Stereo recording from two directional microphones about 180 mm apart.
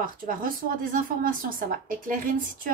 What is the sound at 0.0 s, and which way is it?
A woman's voice, 50° right (ahead or behind).